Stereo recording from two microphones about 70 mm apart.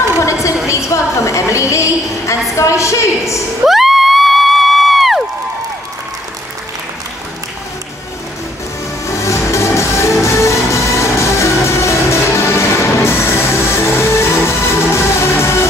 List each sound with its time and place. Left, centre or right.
0.2 s a sound: left
2.5 s a woman's voice: left
3.6 s crowd: centre
9.0 s music: left